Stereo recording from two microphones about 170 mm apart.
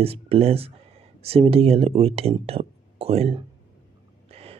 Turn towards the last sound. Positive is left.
turn(degrees=-35)  # may be behind; listen again after turning